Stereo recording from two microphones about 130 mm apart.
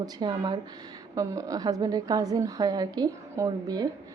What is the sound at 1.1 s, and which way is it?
A woman's voice, 25° right (ahead or behind).